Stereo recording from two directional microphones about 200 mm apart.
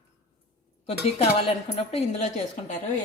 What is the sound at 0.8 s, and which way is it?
Speech, 30° left (ahead or behind).